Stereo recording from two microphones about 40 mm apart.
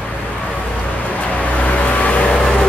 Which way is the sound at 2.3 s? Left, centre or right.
Centre.